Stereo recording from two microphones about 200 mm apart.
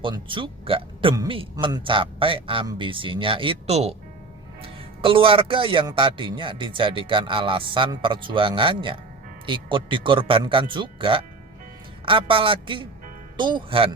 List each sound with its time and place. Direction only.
0.0 s a man's voice: 25° right (ahead or behind)